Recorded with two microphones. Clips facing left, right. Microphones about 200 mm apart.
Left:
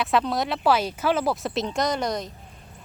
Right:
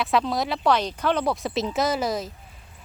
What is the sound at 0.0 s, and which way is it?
A woman's voice, centre (ahead or behind).